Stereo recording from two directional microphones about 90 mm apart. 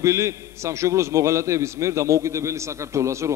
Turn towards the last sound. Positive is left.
turn(degrees=-35)  # may be behind; listen again after turning